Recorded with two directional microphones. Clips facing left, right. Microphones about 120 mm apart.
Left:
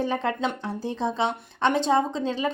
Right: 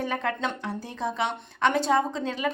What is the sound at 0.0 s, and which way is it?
A woman's voice, 30° left (ahead or behind).